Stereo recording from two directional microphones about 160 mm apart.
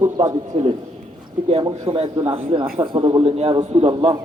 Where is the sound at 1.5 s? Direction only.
30° right (ahead or behind).